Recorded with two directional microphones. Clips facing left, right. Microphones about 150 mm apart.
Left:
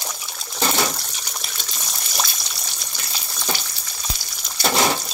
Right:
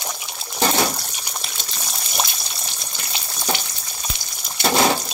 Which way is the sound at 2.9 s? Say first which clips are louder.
Right 2 dB; 20° right (ahead or behind).